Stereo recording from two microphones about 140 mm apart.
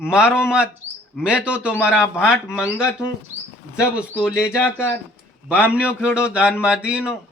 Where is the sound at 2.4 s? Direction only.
20° left (ahead or behind).